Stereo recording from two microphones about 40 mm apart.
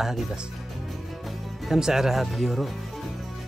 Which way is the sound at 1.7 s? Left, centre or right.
Centre.